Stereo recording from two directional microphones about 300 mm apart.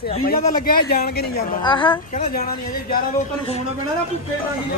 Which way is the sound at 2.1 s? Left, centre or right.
Left.